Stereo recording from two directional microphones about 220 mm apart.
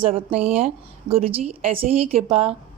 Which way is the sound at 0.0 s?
25° right (ahead or behind).